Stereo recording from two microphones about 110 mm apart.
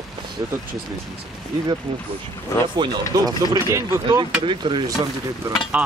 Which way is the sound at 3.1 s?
30° right (ahead or behind).